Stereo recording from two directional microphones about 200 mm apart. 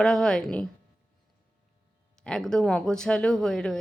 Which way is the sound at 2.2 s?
5° left (ahead or behind).